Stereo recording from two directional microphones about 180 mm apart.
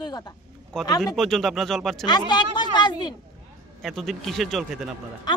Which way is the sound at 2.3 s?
25° left (ahead or behind).